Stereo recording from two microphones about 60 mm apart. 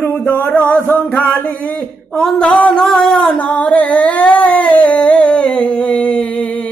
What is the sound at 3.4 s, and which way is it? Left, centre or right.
Singing, left.